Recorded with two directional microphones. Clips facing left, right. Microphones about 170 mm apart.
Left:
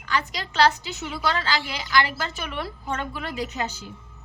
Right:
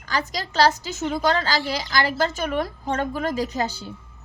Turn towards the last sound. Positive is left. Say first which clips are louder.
# right 4 dB
turn(degrees=-35)  # may be behind; listen again after turning